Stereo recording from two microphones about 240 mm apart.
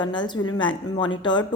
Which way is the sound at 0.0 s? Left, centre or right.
Centre.